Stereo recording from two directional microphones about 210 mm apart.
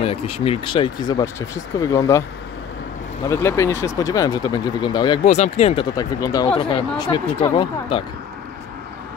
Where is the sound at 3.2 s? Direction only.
15° left (ahead or behind).